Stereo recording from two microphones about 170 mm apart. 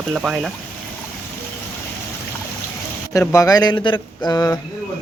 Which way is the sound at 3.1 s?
20° left (ahead or behind).